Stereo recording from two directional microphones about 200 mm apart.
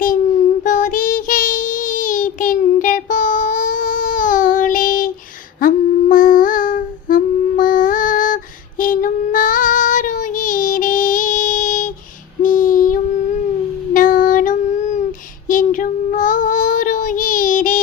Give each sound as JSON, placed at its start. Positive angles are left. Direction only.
{"t": 0.6, "sound": "child singing", "side_deg": 40}
{"t": 5.5, "sound": "humming", "side_deg": 45}
{"t": 8.8, "sound": "child singing", "side_deg": 40}
{"t": 12.4, "sound": "female singing", "side_deg": 45}
{"t": 13.9, "sound": "child singing", "side_deg": 45}